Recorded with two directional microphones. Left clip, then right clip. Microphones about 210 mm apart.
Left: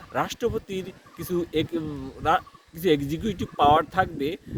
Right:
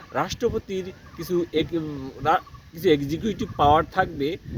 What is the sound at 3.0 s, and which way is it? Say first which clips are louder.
Speech: right 2 dB; 25° left (ahead or behind).